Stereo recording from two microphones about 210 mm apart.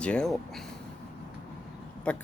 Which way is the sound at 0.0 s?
5° left (ahead or behind).